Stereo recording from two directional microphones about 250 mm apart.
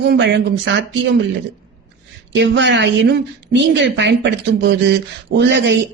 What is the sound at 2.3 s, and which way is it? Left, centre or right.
A woman's voice, right.